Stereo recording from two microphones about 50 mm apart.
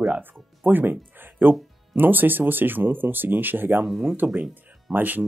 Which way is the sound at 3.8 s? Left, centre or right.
Centre.